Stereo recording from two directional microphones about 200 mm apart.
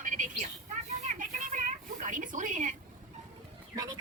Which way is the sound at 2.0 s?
40° right (ahead or behind).